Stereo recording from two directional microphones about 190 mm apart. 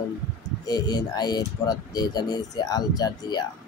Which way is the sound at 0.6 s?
20° left (ahead or behind).